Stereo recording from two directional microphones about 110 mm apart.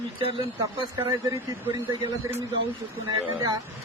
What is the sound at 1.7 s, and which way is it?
Speech, 40° right (ahead or behind).